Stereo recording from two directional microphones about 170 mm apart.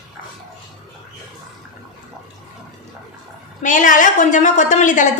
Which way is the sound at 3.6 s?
50° left (ahead or behind).